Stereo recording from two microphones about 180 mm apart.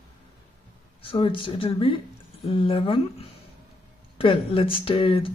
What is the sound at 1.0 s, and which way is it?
Speech, 30° left (ahead or behind).